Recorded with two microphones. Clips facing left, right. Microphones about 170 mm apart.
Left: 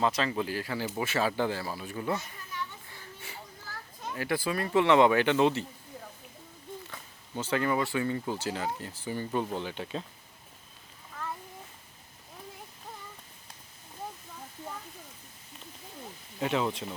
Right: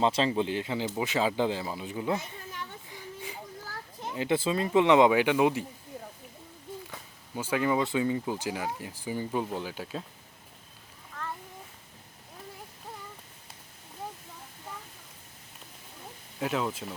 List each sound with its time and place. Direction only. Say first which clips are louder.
0.0 s speech: right 3 dB; 25° right (ahead or behind)
2.9 s a sound: right 5 dB; 15° right (ahead or behind)
4.0 s speech: right 3 dB; 20° right (ahead or behind)
6.9 s speech: left 2 dB; 10° right (ahead or behind)
11.1 s a sound: even; 5° left (ahead or behind)
16.4 s speech: left 1 dB; centre (ahead or behind)